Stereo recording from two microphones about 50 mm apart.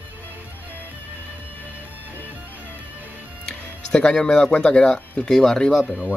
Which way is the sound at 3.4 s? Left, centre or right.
Centre.